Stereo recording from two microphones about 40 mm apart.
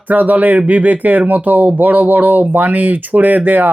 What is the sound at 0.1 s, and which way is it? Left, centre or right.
Speech, right.